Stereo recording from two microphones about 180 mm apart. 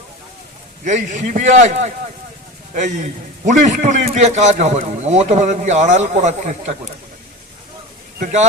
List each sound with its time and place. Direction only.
0.9 s a man's voice: 40° right (ahead or behind)
8.2 s a man's voice: 40° right (ahead or behind)